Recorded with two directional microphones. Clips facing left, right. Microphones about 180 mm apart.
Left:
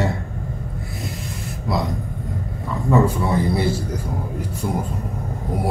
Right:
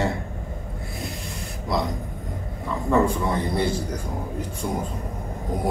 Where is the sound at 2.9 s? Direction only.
5° left (ahead or behind).